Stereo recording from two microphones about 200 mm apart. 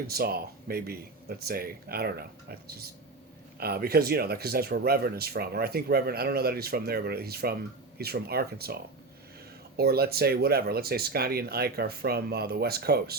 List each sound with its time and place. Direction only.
0.1 s speech: 50° right (ahead or behind)